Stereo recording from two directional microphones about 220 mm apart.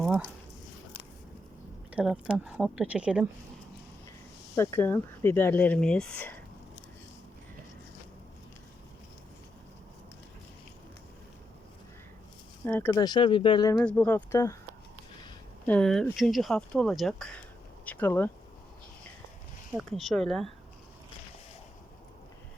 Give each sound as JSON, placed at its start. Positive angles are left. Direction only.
{"t": 1.9, "sound": "speech", "side_deg": -5}
{"t": 4.5, "sound": "speech", "side_deg": 10}
{"t": 12.6, "sound": "speech", "side_deg": 10}
{"t": 12.9, "sound": "speech", "side_deg": 20}
{"t": 13.7, "sound": "speech", "side_deg": 5}
{"t": 15.6, "sound": "speech", "side_deg": 5}
{"t": 19.7, "sound": "speech", "side_deg": 0}